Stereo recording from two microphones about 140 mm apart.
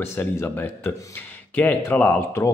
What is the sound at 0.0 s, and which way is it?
Speech, 20° left (ahead or behind).